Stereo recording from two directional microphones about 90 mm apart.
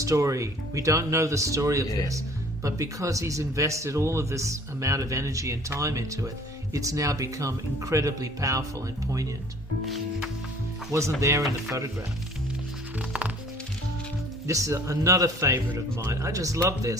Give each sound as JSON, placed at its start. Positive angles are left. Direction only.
{"t": 0.0, "sound": "a man's voice", "side_deg": -35}
{"t": 10.9, "sound": "a man's voice", "side_deg": -35}
{"t": 13.0, "sound": "music", "side_deg": -15}
{"t": 14.4, "sound": "a man's voice", "side_deg": -35}